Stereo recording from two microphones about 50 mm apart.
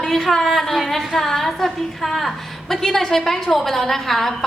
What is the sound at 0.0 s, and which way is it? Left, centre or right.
A woman's voice, centre.